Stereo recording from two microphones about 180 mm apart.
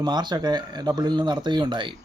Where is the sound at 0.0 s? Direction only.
25° right (ahead or behind).